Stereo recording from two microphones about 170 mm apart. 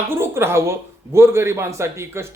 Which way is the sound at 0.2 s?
15° right (ahead or behind).